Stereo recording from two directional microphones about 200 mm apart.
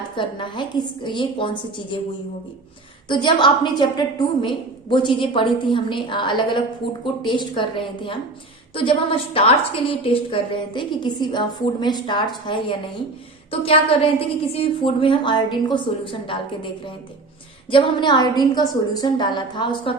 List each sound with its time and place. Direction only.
0.2 s a woman's voice: 25° left (ahead or behind)
3.1 s a woman's voice: 25° left (ahead or behind)
17.7 s a woman's voice: 25° left (ahead or behind)